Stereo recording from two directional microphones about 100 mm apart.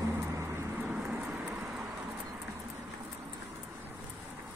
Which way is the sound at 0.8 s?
15° right (ahead or behind).